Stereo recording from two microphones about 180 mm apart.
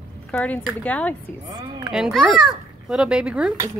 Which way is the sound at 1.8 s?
5° right (ahead or behind).